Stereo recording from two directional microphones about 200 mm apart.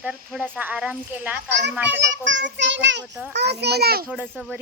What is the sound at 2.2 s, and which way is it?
A child's voice, 65° right (ahead or behind).